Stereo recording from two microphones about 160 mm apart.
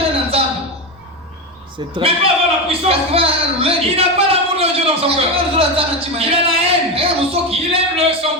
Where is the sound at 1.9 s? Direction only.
35° right (ahead or behind).